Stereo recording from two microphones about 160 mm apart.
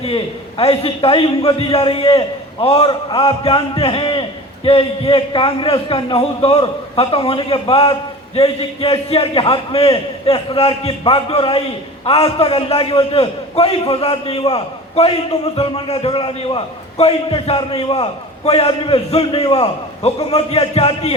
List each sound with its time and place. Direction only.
0.0 s a man's voice: 35° left (ahead or behind)